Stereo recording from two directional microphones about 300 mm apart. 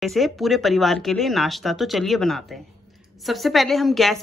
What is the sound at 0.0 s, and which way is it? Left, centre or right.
A woman's voice, centre.